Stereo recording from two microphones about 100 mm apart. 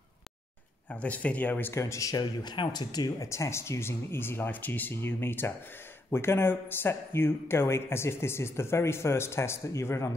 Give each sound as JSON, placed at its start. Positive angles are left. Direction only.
{"t": 0.8, "sound": "speech", "side_deg": 15}
{"t": 3.3, "sound": "speech", "side_deg": 30}